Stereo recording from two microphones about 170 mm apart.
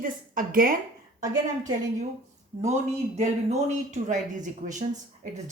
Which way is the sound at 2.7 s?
40° right (ahead or behind).